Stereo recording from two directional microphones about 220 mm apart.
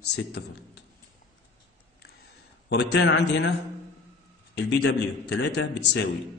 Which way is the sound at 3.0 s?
50° left (ahead or behind).